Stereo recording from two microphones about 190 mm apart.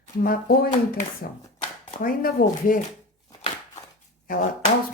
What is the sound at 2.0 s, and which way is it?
Speech, 50° left (ahead or behind).